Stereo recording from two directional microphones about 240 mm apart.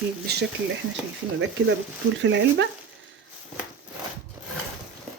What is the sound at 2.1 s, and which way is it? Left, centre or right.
Speech, right.